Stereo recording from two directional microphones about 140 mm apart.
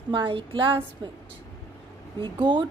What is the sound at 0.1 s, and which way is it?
Speech, 35° right (ahead or behind).